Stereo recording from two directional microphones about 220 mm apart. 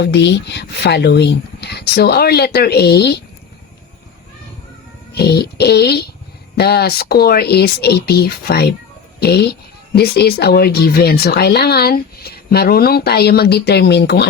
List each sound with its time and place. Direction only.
0.0 s speech: 50° left (ahead or behind)
5.1 s speech: 45° left (ahead or behind)